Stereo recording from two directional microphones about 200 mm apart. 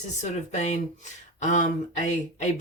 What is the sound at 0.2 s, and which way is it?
Speech, 35° left (ahead or behind).